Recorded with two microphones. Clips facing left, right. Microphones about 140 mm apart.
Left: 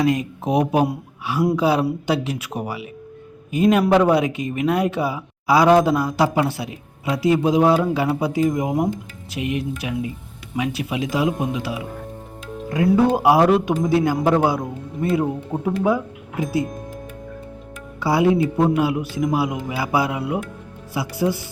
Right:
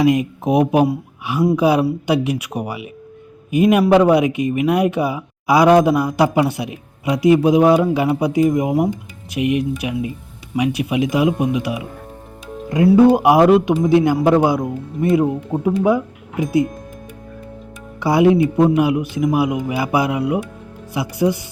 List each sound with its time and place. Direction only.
0.0 s speech: 15° right (ahead or behind)
12.9 s speech: 15° right (ahead or behind)
15.2 s speech: 5° right (ahead or behind)
18.0 s speech: 20° right (ahead or behind)